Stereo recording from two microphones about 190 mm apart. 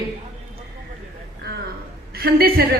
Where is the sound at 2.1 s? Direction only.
55° right (ahead or behind).